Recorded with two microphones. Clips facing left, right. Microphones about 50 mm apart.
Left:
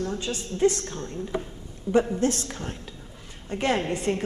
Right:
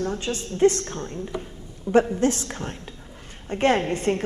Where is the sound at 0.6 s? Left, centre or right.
Right.